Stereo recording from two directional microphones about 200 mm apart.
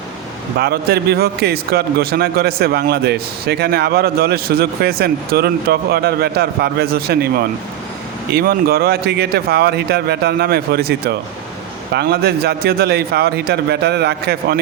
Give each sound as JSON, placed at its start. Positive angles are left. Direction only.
{"t": 0.6, "sound": "a man's voice", "side_deg": -50}